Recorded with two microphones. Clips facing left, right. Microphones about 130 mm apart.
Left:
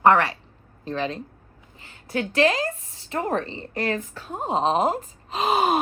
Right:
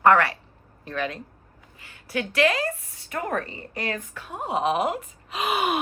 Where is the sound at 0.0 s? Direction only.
20° left (ahead or behind).